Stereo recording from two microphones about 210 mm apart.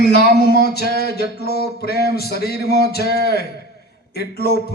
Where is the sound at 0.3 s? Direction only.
50° left (ahead or behind).